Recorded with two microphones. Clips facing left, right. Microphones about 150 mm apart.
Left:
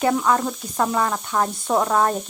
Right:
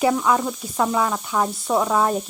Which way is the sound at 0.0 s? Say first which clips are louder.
Even; 5° right (ahead or behind).